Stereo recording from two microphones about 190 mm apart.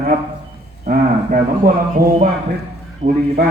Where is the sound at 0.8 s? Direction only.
40° right (ahead or behind).